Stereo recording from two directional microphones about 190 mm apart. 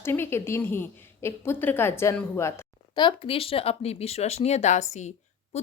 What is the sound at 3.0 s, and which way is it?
Speech, 30° left (ahead or behind).